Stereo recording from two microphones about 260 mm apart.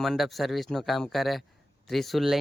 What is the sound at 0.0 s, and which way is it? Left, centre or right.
Speech, centre.